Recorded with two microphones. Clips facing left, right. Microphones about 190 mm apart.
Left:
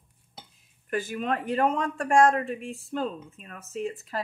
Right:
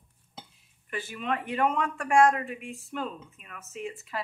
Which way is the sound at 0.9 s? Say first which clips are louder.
Left 4 dB; 45° left (ahead or behind).